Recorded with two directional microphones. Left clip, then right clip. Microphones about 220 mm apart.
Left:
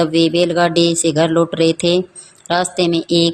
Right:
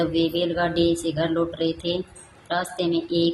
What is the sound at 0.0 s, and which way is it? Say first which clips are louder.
Speech: left 8 dB; 30° left (ahead or behind).